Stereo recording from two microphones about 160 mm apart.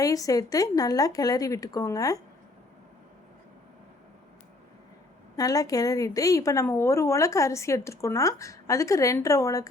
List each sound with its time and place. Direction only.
0.0 s a woman's voice: 20° left (ahead or behind)
5.4 s a woman's voice: 20° left (ahead or behind)